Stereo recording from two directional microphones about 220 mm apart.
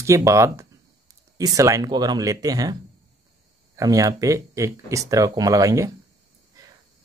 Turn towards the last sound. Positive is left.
turn(degrees=-15)  # may be behind; listen again after turning